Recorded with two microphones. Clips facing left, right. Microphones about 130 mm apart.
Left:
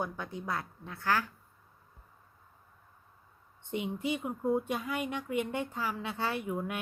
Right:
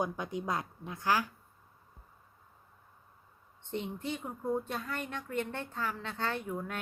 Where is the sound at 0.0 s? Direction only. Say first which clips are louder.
Right 3 dB; 15° right (ahead or behind).